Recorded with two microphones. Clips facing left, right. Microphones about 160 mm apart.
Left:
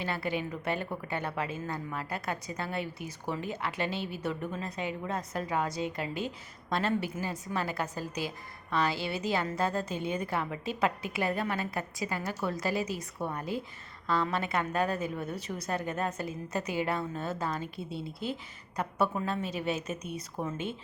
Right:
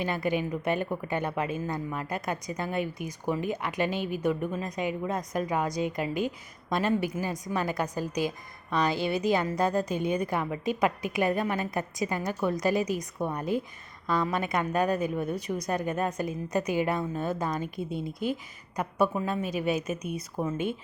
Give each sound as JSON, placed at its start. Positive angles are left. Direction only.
{"t": 0.0, "sound": "a woman's voice", "side_deg": -15}